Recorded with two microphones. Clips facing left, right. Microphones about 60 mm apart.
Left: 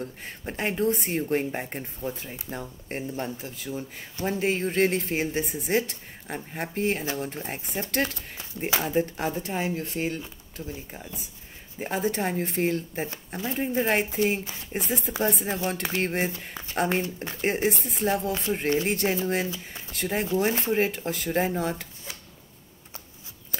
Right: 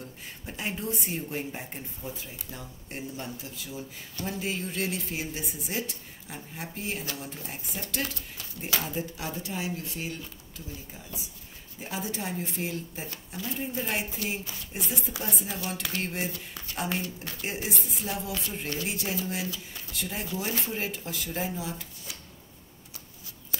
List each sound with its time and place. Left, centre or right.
0.0 s speech: left
8.4 s speech: left
8.8 s speech: left
11.8 s speech: left
14.7 s speech: left
16.7 s speech: left
17.0 s speech: left
17.5 s speech: left